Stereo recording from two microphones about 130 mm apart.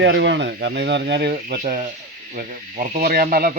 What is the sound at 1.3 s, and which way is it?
Speech, 90° right.